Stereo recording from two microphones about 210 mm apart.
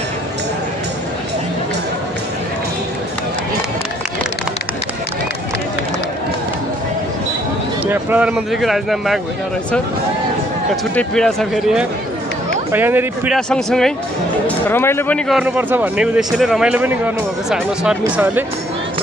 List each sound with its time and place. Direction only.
7.8 s speech: 10° right (ahead or behind)
11.0 s speech: 5° left (ahead or behind)
12.7 s speech: 10° right (ahead or behind)
13.5 s speech: centre (ahead or behind)